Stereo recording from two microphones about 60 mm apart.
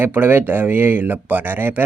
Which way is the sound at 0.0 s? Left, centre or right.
Right.